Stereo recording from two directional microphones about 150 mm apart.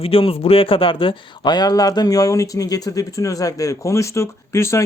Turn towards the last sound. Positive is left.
turn(degrees=20)  # may be behind; listen again after turning